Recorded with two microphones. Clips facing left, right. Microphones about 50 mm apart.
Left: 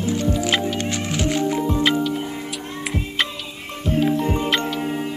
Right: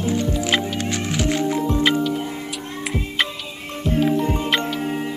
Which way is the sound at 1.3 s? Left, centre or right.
Centre.